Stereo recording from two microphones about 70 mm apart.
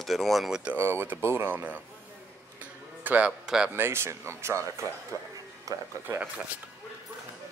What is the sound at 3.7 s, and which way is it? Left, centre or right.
Speech, right.